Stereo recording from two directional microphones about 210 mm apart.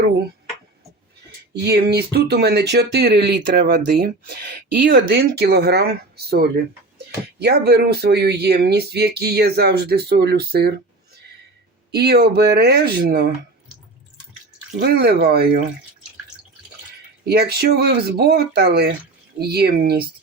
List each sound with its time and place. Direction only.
1.6 s speech: 50° right (ahead or behind)
14.8 s speech: 50° right (ahead or behind)
17.2 s speech: 50° right (ahead or behind)